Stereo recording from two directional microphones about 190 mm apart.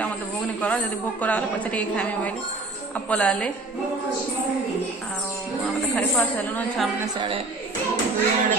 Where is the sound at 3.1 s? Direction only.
5° left (ahead or behind).